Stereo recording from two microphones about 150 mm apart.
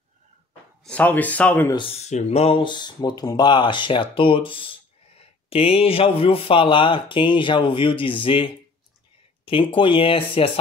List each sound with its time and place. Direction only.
0.8 s speech: 10° left (ahead or behind)
1.7 s speech: 35° left (ahead or behind)